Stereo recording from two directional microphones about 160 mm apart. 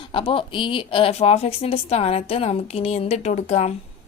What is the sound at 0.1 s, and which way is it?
A woman's voice, 35° left (ahead or behind).